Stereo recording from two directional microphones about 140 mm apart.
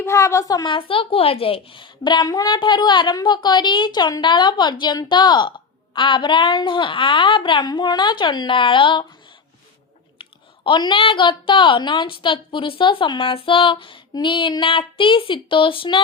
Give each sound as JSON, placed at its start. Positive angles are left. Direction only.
{"t": 0.0, "sound": "a woman's voice", "side_deg": 20}
{"t": 10.2, "sound": "a woman's voice", "side_deg": 35}